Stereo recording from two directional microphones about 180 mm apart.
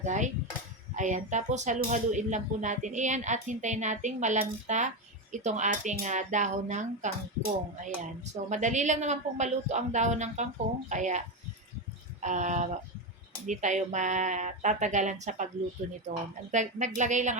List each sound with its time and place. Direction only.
0.0 s speech: 40° right (ahead or behind)
12.2 s speech: 40° right (ahead or behind)